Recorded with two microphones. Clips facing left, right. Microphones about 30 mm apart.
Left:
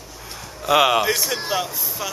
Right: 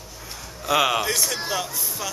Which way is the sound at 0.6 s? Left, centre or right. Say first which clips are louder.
Left 4 dB; centre.